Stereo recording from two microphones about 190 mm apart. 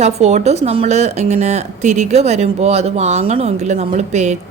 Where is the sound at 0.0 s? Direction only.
35° right (ahead or behind).